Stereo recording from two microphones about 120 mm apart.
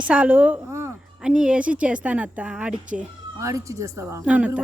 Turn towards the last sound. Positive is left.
turn(degrees=-10)  # may be behind; listen again after turning